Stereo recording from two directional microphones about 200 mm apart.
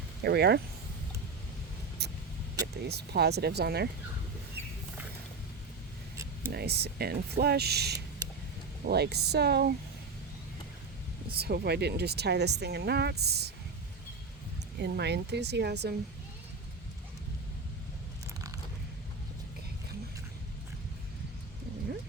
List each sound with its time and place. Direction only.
0.2 s speech: 55° right (ahead or behind)
2.0 s vehicle: 55° right (ahead or behind)
2.8 s speech: 55° right (ahead or behind)
6.5 s speech: 55° right (ahead or behind)
11.3 s speech: 55° right (ahead or behind)
14.8 s speech: 55° right (ahead or behind)